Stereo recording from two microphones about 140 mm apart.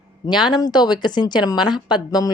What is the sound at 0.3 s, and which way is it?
A woman's voice, 30° left (ahead or behind).